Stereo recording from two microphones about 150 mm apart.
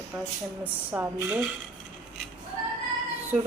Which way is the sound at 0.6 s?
15° right (ahead or behind).